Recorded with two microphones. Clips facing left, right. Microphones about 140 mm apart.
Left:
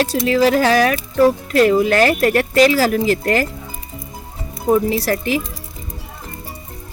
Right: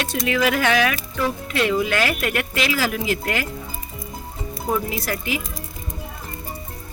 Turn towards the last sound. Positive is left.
turn(degrees=40)  # may be behind; listen again after turning